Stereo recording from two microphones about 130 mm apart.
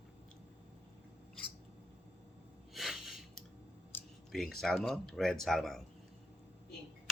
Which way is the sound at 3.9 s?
15° left (ahead or behind).